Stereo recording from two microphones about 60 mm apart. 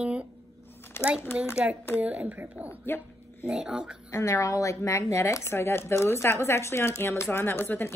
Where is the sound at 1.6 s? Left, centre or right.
Right.